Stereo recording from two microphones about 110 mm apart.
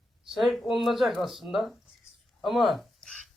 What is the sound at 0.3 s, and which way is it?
Speech, centre (ahead or behind).